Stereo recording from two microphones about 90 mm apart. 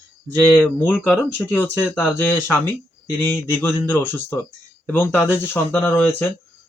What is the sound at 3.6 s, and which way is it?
Speech, 25° left (ahead or behind).